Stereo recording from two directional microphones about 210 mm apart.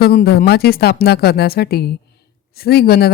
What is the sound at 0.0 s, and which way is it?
Speech, 45° left (ahead or behind).